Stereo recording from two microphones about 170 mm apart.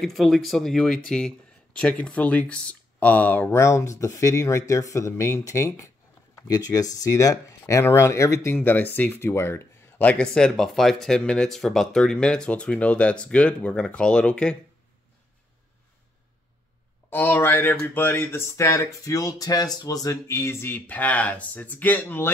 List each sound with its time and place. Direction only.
0.0 s speech: centre (ahead or behind)
17.1 s speech: 15° left (ahead or behind)